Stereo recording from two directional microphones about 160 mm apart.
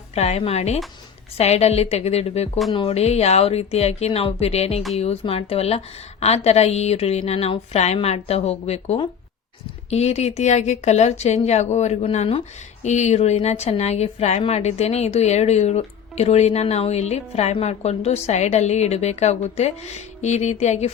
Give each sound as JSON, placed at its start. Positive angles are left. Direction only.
{"t": 0.1, "sound": "a woman's voice", "side_deg": 40}